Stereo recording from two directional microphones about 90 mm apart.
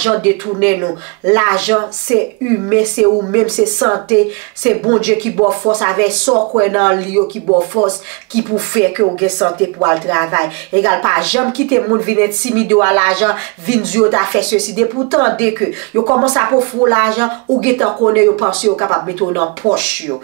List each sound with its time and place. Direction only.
0.0 s speech: 15° right (ahead or behind)
5.4 s speech: 30° right (ahead or behind)
5.7 s speech: 20° right (ahead or behind)
7.4 s speech: 30° right (ahead or behind)
8.4 s speech: 20° right (ahead or behind)
16.0 s speech: 25° right (ahead or behind)